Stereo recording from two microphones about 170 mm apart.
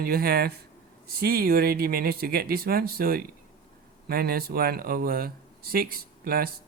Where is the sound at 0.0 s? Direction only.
60° right (ahead or behind).